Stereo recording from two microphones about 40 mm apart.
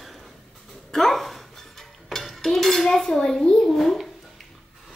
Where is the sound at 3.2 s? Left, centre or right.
Centre.